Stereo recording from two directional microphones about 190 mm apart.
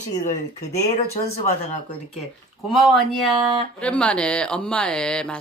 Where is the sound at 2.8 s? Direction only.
Centre (ahead or behind).